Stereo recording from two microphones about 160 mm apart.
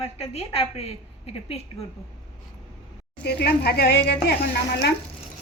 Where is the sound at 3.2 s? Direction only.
90° left.